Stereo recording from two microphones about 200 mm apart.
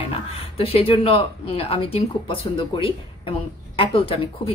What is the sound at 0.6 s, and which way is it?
Speech, 30° left (ahead or behind).